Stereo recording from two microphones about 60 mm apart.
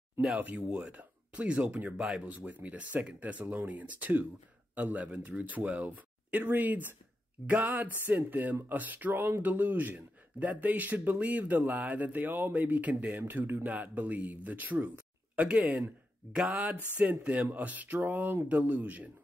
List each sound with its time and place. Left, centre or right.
0.4 s speech: right
2.0 s speech: centre
2.2 s speech: right
7.4 s a sound: right
8.6 s speech: right
16.9 s speech: right